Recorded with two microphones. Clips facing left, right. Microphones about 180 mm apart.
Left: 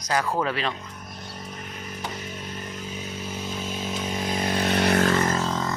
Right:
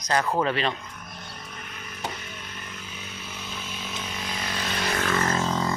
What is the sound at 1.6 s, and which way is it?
Music, 40° left (ahead or behind).